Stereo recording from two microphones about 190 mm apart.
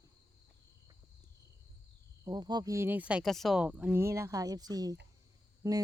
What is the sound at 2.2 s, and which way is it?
Speech, 20° right (ahead or behind).